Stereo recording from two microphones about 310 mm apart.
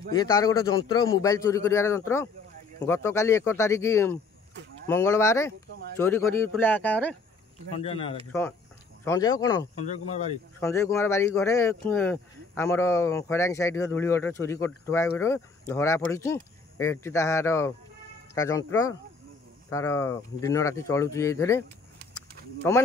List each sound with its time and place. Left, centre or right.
0.1 s speech: centre
7.7 s speech: centre
8.3 s speech: centre
9.8 s speech: left
10.6 s speech: centre